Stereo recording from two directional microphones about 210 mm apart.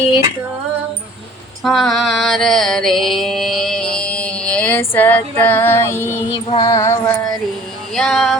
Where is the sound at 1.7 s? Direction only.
Centre (ahead or behind).